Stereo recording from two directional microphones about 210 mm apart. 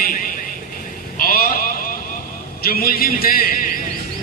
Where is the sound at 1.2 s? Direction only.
45° left (ahead or behind).